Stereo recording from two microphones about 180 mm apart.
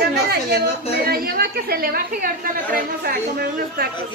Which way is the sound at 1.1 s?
55° right (ahead or behind).